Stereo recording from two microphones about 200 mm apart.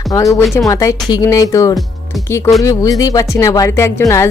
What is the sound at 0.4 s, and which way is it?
Music, centre (ahead or behind).